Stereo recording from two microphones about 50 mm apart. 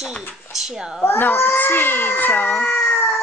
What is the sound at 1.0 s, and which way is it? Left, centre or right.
Speech, left.